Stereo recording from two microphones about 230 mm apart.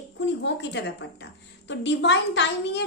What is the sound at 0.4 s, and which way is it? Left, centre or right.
A woman's voice, left.